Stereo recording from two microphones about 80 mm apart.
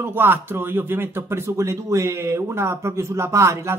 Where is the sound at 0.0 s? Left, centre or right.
Right.